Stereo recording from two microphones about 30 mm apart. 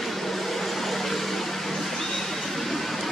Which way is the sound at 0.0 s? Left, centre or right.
Centre.